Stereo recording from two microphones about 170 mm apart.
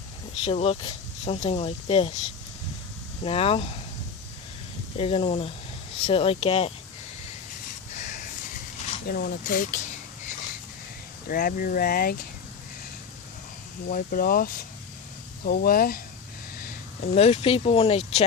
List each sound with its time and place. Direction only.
0.4 s speech: 35° left (ahead or behind)
3.2 s speech: 35° left (ahead or behind)
4.9 s speech: 35° left (ahead or behind)
7.9 s a sound: 45° left (ahead or behind)
9.0 s speech: 60° left (ahead or behind)
11.3 s speech: 55° left (ahead or behind)
13.8 s speech: 55° left (ahead or behind)
16.6 s speech: 45° left (ahead or behind)